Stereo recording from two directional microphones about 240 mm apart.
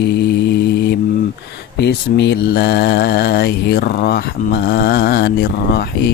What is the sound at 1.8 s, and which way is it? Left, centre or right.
Mantra, left.